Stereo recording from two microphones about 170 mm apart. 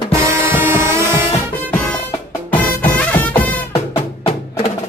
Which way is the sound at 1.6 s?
10° left (ahead or behind).